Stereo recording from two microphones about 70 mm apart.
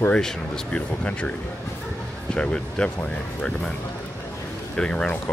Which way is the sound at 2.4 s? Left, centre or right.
Centre.